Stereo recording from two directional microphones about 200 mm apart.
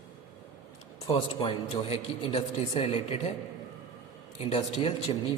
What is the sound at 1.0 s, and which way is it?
Speech, 25° left (ahead or behind).